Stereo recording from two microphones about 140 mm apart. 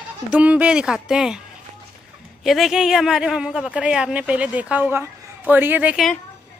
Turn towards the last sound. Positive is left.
turn(degrees=-10)  # may be behind; listen again after turning